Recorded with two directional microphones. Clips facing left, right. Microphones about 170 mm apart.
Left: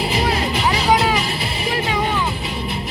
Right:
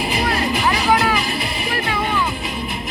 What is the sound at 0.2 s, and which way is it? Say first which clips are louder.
Music: right 1 dB; 20° left (ahead or behind).